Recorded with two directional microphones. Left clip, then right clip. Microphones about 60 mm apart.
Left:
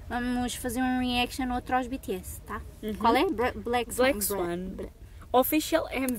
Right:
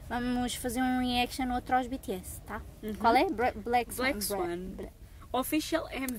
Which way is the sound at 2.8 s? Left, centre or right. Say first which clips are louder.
Left 5 dB; left.